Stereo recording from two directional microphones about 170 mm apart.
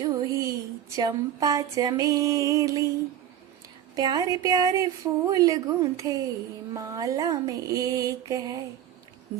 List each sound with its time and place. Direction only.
0.0 s a sound: 20° right (ahead or behind)
0.9 s speech: 20° right (ahead or behind)
3.9 s speech: 25° right (ahead or behind)